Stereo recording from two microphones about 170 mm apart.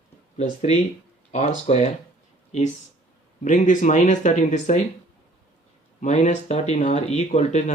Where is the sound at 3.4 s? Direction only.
50° left (ahead or behind).